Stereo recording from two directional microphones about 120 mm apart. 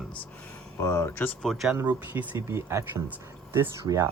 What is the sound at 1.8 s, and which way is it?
Speech, 15° right (ahead or behind).